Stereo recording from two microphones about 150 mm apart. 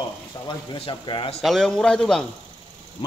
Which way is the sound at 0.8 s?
35° left (ahead or behind).